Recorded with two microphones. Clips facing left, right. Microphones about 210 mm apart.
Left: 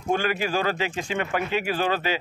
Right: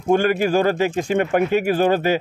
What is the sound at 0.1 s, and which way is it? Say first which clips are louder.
Speech: right 8 dB; 50° right (ahead or behind).